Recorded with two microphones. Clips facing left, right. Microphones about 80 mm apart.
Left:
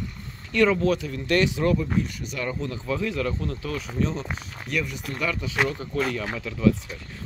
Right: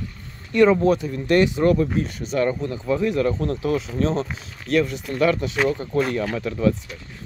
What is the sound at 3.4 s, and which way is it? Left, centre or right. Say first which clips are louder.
Speech: right 8 dB; right.